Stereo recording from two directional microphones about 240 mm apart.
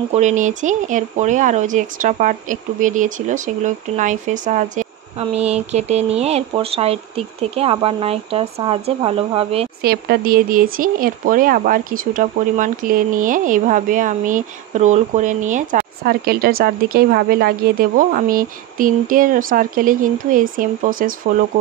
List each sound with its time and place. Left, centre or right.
0.1 s speech: right
9.8 s speech: right